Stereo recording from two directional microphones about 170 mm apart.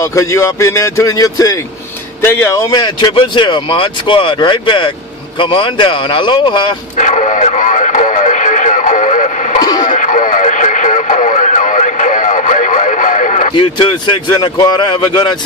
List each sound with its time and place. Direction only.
0.0 s speech: 20° left (ahead or behind)
7.0 s radio: 45° left (ahead or behind)
9.6 s radio: 25° left (ahead or behind)
9.8 s radio: 45° left (ahead or behind)
13.5 s speech: 30° left (ahead or behind)